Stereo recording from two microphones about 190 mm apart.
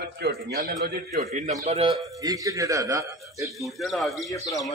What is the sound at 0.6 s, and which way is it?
A man's voice, 45° right (ahead or behind).